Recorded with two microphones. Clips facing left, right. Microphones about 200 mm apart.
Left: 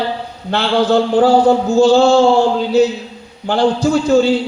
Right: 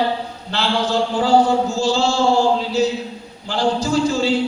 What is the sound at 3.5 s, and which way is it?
Speech, 60° left (ahead or behind).